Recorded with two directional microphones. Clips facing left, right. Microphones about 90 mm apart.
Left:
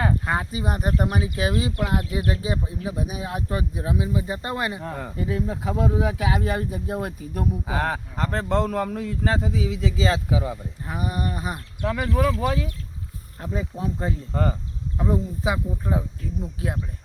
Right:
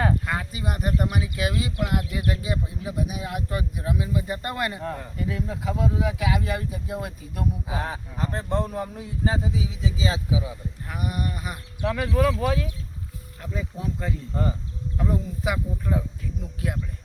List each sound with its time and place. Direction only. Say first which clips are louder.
0.3 s speech: left 4 dB; 30° left (ahead or behind); by 4.9 s 10° left (ahead or behind)
5.1 s speech: left 3 dB; 30° left (ahead or behind)
7.7 s speech: left 5 dB; 70° left (ahead or behind); by 10.6 s 55° left (ahead or behind)
10.8 s speech: left 3 dB; 25° left (ahead or behind)
11.8 s speech: even; centre (ahead or behind)
13.4 s speech: left 3 dB; 35° left (ahead or behind)
14.3 s speech: left 3 dB; 90° left
14.9 s speech: left 3 dB; 20° left (ahead or behind)